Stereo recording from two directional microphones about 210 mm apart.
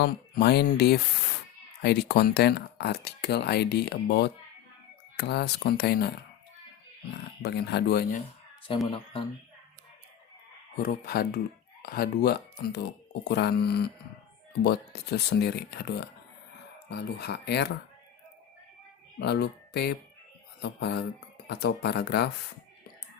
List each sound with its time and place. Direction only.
0.0 s speech: 50° left (ahead or behind)
7.4 s speech: 50° left (ahead or behind)
8.7 s speech: 25° left (ahead or behind)
10.8 s speech: 45° left (ahead or behind)
19.2 s speech: 50° left (ahead or behind)